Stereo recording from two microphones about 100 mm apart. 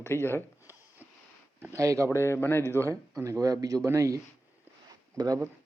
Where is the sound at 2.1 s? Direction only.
25° left (ahead or behind).